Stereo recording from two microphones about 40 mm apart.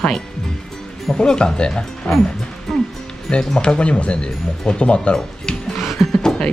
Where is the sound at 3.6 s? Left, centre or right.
Left.